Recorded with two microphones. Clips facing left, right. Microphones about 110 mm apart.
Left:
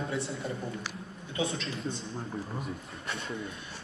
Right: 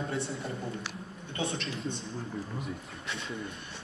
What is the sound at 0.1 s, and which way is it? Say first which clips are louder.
A man's voice: left 1 dB; centre (ahead or behind).